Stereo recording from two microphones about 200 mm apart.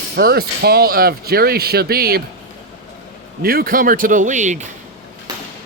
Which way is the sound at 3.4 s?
50° right (ahead or behind).